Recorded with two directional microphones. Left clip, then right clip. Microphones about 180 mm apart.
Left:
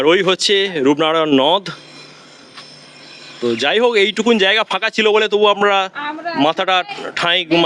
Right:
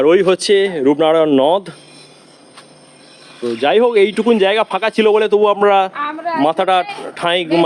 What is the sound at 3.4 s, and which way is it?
Speech, 5° left (ahead or behind).